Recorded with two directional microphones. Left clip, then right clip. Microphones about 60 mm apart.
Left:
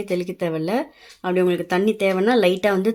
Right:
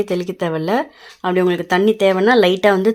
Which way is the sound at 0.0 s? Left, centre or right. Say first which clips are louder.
Right 4 dB; right.